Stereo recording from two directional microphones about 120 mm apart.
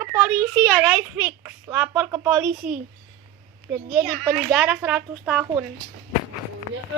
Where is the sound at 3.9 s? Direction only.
Centre (ahead or behind).